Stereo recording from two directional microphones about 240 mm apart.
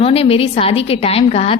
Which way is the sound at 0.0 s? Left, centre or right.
Left.